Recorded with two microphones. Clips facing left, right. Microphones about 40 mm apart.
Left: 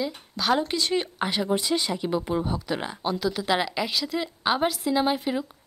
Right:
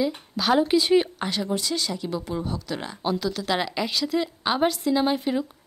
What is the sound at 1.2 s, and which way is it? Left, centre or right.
Speech, centre.